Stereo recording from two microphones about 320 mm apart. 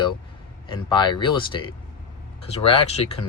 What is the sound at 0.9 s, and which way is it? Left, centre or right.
Speech, centre.